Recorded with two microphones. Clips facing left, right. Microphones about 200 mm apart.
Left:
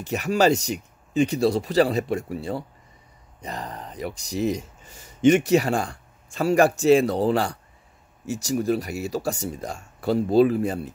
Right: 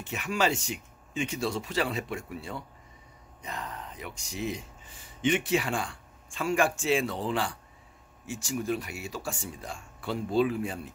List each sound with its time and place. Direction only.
0.0 s speech: 40° left (ahead or behind)